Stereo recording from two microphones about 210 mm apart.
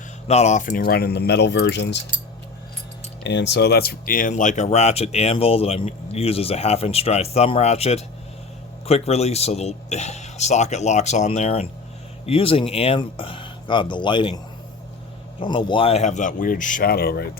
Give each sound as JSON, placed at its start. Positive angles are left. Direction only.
{"t": 0.3, "sound": "speech", "side_deg": 30}
{"t": 3.2, "sound": "speech", "side_deg": 55}